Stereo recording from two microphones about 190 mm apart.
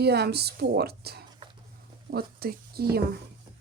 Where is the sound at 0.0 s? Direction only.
60° right (ahead or behind).